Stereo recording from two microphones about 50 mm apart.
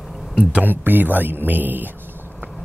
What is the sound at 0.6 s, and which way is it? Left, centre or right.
Speech, right.